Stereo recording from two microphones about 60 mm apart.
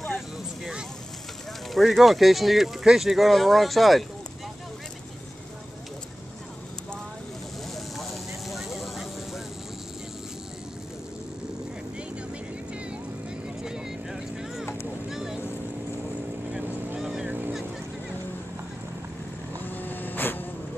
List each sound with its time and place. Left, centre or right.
1.7 s speech: centre
8.0 s vehicle: centre
13.6 s vehicle: centre
15.0 s boat: centre
17.0 s vehicle: centre
17.3 s vehicle: right
19.6 s vehicle: left